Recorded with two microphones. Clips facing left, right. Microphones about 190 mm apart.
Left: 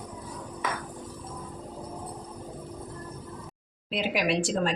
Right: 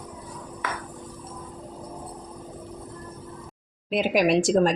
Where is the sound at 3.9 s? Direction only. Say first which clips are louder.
Right 6 dB; 50° right (ahead or behind).